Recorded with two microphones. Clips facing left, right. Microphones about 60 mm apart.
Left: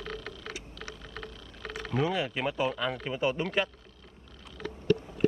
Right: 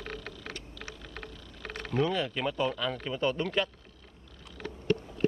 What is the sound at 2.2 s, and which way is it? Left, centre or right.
Speech, left.